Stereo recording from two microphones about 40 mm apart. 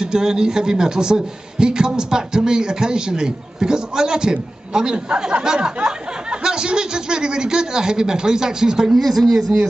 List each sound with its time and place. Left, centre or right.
0.0 s a man's voice: centre
8.9 s speech: centre